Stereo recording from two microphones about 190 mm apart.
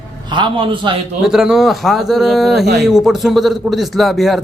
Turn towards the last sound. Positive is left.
turn(degrees=0)  # may be behind; listen again after turning